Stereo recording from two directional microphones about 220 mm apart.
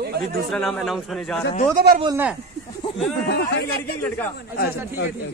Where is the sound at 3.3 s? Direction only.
50° left (ahead or behind).